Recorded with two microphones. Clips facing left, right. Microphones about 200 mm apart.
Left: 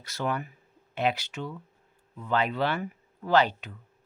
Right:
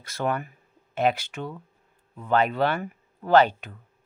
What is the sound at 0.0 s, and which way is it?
Speech, 50° right (ahead or behind).